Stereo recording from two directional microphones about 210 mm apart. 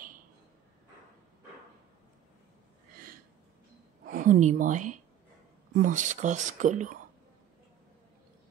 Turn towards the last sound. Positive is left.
turn(degrees=-35)  # may be behind; listen again after turning